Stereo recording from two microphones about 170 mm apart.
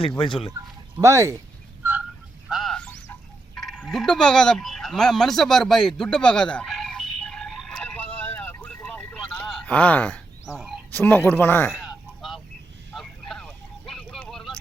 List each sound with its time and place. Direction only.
0.2 s speech: 30° left (ahead or behind)
0.9 s speech: 15° right (ahead or behind)
1.8 s bird: 10° right (ahead or behind)
2.5 s a sound: centre (ahead or behind)
10.9 s speech: 10° left (ahead or behind)
11.7 s honk: centre (ahead or behind)
12.9 s vehicle: centre (ahead or behind)